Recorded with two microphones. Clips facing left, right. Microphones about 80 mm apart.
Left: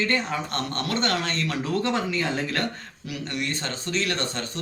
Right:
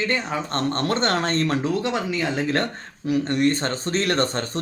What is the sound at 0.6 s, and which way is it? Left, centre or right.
Speech, right.